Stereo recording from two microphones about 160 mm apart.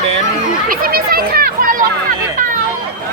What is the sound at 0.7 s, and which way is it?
Speech, 65° right (ahead or behind).